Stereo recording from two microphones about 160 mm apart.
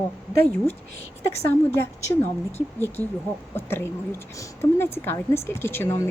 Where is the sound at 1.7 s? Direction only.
15° left (ahead or behind).